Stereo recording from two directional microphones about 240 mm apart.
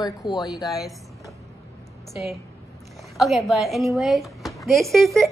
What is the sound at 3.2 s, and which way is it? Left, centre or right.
Speech, centre.